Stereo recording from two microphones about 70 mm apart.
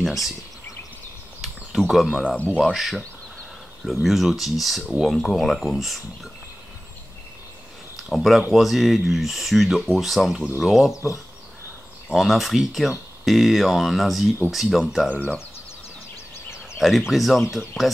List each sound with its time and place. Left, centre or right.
0.0 s speech: centre
1.7 s speech: centre
2.0 s speech: centre
2.6 s speech: centre
8.1 s speech: centre
10.9 s speech: left
12.1 s speech: centre
16.7 s speech: centre